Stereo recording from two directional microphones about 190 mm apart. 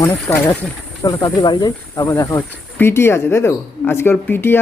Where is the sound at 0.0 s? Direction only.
15° left (ahead or behind).